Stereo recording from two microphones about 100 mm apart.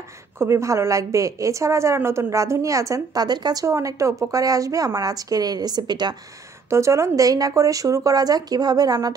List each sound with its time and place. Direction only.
0.4 s a woman's voice: 30° right (ahead or behind)
3.3 s speech: 45° right (ahead or behind)
3.6 s a woman's voice: 30° right (ahead or behind); by 6.1 s 45° right (ahead or behind)
6.7 s a woman's voice: 30° right (ahead or behind)